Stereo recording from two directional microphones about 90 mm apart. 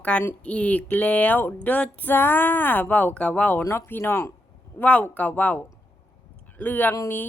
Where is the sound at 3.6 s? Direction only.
30° left (ahead or behind).